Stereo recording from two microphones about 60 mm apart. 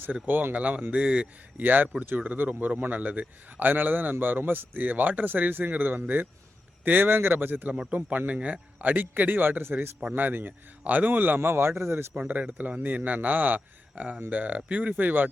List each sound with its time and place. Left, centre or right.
0.0 s speech: right
1.6 s a man's voice: right
7.7 s a man's voice: centre; by 11.3 s right
11.3 s a man's voice: right
12.3 s speech: right